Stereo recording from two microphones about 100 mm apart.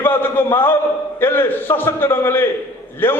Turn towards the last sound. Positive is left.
turn(degrees=20)  # may be behind; listen again after turning